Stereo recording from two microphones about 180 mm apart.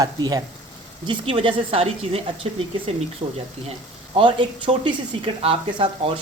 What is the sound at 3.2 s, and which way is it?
Speech, 25° right (ahead or behind).